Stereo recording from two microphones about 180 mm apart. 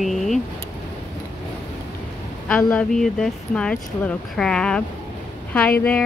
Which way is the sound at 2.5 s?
5° left (ahead or behind).